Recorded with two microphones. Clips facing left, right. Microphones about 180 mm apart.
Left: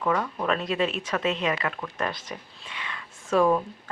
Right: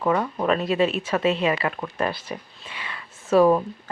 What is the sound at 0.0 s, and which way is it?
Speech, 25° right (ahead or behind).